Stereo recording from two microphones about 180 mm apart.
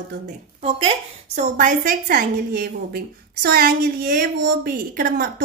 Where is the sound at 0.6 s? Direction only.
35° right (ahead or behind).